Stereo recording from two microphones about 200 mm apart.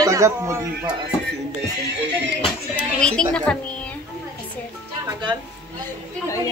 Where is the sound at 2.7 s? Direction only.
5° left (ahead or behind).